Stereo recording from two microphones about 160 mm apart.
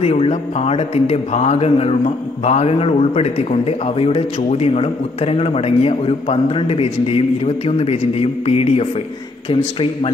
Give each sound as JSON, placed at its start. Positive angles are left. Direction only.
{"t": 0.0, "sound": "a man's voice", "side_deg": 40}